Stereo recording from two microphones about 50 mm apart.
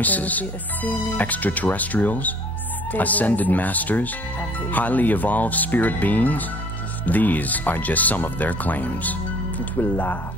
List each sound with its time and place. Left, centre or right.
0.0 s speech: left